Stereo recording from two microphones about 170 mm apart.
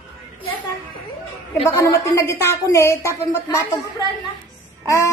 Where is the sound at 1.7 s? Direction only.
15° left (ahead or behind).